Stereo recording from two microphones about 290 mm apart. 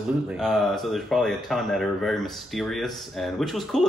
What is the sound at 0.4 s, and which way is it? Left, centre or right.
Speech, centre.